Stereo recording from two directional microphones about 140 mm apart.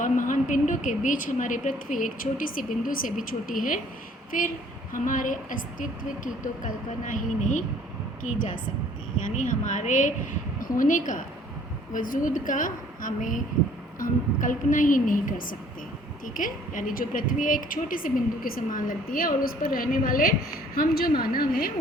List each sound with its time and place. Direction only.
0.0 s a woman's voice: 65° left (ahead or behind); by 21.7 s 90° left